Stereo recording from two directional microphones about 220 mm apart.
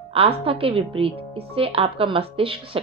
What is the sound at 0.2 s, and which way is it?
A woman's voice, 25° right (ahead or behind).